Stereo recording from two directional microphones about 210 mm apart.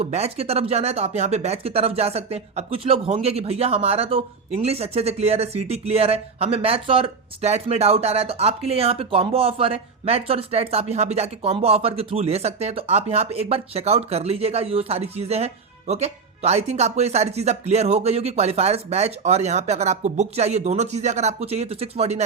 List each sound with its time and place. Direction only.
0.0 s speech: 30° right (ahead or behind)